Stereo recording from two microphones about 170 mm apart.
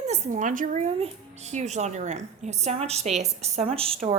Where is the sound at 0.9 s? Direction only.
40° right (ahead or behind).